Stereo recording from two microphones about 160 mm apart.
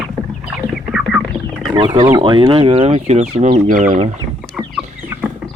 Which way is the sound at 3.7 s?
55° right (ahead or behind).